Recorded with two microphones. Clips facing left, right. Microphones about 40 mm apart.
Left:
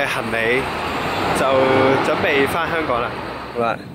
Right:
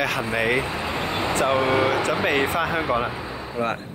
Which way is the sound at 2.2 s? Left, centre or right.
Centre.